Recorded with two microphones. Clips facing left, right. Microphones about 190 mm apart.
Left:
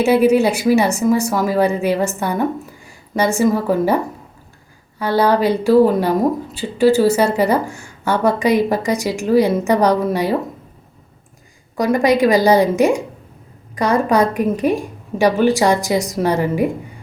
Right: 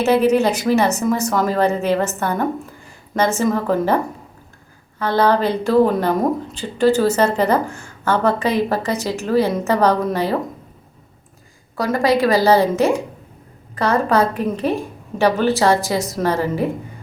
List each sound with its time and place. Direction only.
0.0 s a woman's voice: 10° left (ahead or behind)
11.8 s a woman's voice: 15° left (ahead or behind)